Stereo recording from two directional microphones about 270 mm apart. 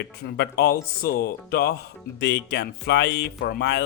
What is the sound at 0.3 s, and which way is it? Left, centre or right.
Speech, left.